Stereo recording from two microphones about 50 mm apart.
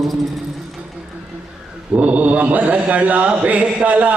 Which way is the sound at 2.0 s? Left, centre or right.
Right.